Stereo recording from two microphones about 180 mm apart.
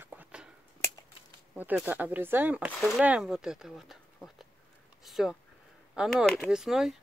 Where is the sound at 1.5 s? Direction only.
10° right (ahead or behind).